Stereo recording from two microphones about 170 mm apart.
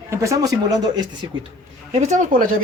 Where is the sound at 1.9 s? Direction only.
45° right (ahead or behind).